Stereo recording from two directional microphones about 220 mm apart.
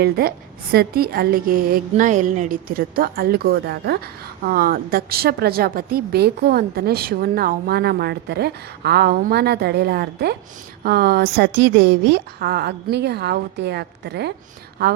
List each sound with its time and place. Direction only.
0.0 s a woman's voice: 45° right (ahead or behind)